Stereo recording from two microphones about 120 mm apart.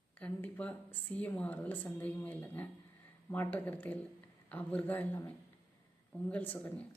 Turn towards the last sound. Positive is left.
turn(degrees=15)  # may be behind; listen again after turning